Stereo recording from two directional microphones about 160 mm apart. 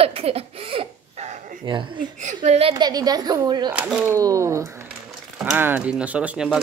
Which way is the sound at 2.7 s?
25° right (ahead or behind).